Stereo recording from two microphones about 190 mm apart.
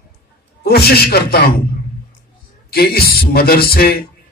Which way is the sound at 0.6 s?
55° left (ahead or behind).